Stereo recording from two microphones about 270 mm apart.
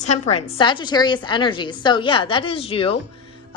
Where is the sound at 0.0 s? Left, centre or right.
Left.